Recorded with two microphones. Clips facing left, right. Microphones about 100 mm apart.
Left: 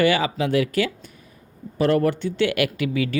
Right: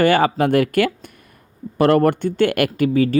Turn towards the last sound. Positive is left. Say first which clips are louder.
# right 7 dB
turn(degrees=-40)  # may be behind; listen again after turning